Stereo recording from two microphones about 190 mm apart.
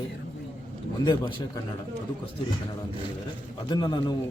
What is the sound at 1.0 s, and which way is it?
Speech, 20° left (ahead or behind).